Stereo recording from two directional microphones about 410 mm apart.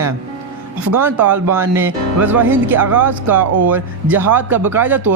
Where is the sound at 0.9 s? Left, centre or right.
Right.